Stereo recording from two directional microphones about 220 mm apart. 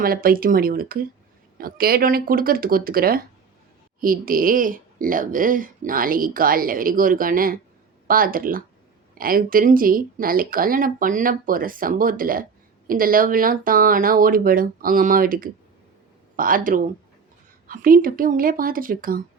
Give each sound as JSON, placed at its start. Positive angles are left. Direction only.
{"t": 0.0, "sound": "speech", "side_deg": -40}